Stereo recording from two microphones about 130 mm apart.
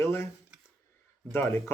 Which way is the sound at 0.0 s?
20° left (ahead or behind).